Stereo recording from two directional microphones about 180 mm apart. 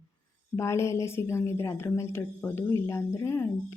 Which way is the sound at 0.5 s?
15° left (ahead or behind).